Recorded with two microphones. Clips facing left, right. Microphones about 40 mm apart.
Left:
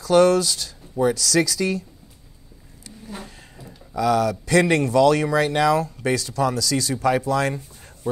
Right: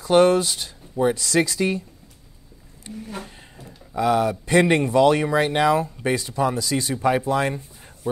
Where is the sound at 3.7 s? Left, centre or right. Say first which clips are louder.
Even; centre.